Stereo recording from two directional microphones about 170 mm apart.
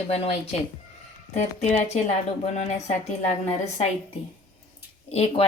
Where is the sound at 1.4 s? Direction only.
40° left (ahead or behind).